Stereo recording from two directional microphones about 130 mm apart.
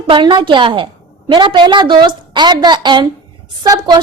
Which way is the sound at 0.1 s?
35° right (ahead or behind).